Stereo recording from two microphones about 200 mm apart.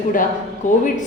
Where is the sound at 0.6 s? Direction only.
40° left (ahead or behind).